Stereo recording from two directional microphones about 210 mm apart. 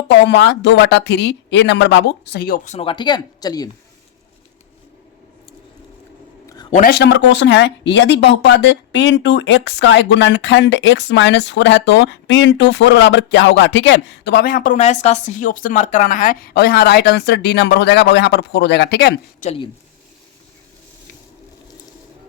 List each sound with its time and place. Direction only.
0.1 s speech: 55° left (ahead or behind)
2.6 s speech: 30° left (ahead or behind)
6.7 s a man's voice: 35° left (ahead or behind)
6.9 s speech: 55° left (ahead or behind)
19.4 s speech: 30° left (ahead or behind)